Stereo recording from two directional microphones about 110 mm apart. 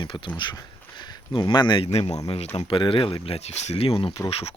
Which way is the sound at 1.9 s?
75° left (ahead or behind).